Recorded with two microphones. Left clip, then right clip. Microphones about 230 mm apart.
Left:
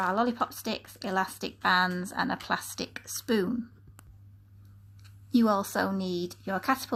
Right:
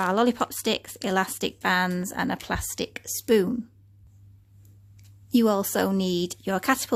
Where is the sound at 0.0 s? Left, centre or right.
Right.